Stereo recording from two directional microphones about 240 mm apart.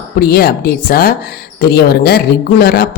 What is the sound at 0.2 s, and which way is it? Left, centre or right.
A woman's voice, left.